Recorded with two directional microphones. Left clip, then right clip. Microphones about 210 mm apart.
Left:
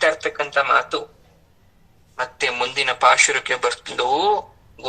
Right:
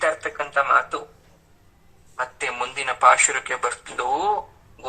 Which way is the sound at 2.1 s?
30° left (ahead or behind).